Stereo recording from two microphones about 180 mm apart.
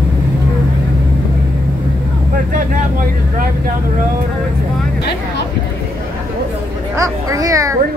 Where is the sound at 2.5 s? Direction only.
50° right (ahead or behind).